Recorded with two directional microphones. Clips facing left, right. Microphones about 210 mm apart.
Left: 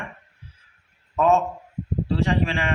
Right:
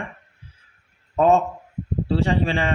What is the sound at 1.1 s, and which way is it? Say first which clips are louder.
A man's voice: right 2 dB; 35° right (ahead or behind).